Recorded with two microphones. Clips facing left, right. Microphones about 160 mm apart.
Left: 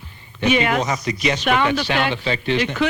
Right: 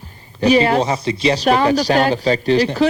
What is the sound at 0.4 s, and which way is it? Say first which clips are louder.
Speech: right 5 dB; 35° right (ahead or behind).